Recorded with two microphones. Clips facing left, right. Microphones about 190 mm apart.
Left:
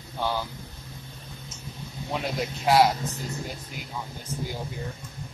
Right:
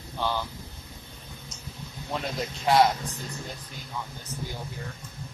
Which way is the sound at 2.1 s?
5° left (ahead or behind).